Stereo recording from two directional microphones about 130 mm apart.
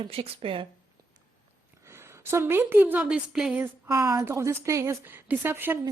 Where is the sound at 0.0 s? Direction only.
50° right (ahead or behind).